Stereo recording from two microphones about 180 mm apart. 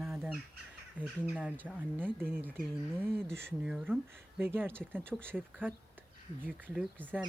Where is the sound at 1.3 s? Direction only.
5° right (ahead or behind).